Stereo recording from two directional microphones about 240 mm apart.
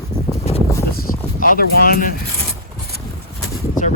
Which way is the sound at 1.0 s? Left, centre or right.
Left.